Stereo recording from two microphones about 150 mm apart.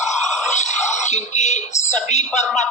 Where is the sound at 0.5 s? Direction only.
50° left (ahead or behind).